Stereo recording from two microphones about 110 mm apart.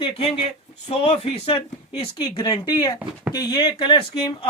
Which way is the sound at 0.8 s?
75° left (ahead or behind).